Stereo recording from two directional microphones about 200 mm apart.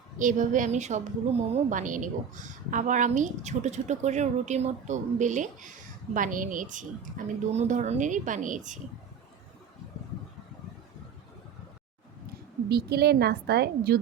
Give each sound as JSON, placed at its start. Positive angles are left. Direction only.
{"t": 0.2, "sound": "a woman's voice", "side_deg": -40}
{"t": 12.3, "sound": "a woman's voice", "side_deg": -55}